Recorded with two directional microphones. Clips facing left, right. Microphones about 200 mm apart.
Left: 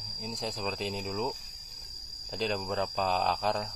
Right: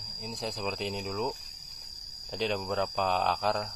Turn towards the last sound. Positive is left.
turn(degrees=0)  # may be behind; listen again after turning